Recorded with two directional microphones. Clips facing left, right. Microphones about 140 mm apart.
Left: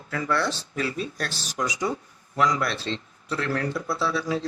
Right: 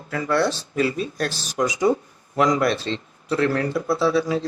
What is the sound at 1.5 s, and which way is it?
Speech, 20° right (ahead or behind).